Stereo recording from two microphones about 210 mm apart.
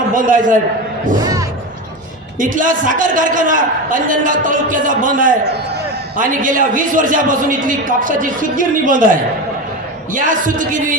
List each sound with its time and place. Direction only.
0.1 s a man's voice: 40° right (ahead or behind)
1.2 s music: 15° right (ahead or behind)
2.4 s a man's voice: 40° right (ahead or behind)
10.1 s a man's voice: 40° right (ahead or behind)